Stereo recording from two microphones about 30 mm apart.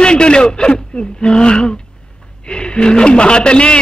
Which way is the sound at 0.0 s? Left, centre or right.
Left.